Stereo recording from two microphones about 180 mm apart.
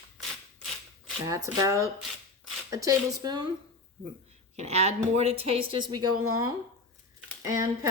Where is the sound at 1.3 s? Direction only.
20° right (ahead or behind).